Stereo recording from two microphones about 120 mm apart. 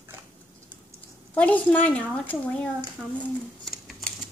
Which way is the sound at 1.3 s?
10° left (ahead or behind).